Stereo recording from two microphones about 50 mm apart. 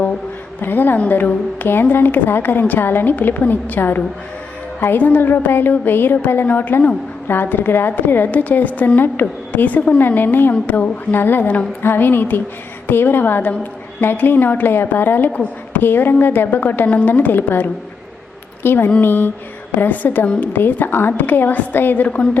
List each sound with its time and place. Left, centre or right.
0.6 s a woman's voice: left
15.3 s speech: left
15.8 s a woman's voice: left
22.0 s a woman's voice: left